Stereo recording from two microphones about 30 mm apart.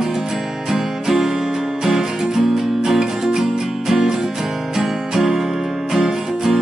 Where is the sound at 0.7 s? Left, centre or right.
Centre.